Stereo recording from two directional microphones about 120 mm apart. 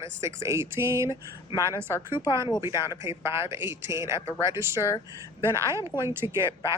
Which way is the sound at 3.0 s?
20° right (ahead or behind).